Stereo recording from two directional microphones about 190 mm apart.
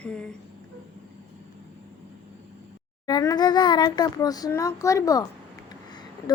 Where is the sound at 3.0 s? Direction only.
20° left (ahead or behind).